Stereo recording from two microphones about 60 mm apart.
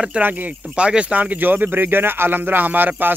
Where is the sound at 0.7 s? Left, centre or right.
Centre.